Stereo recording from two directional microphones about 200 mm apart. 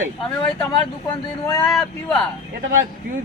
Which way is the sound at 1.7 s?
Centre (ahead or behind).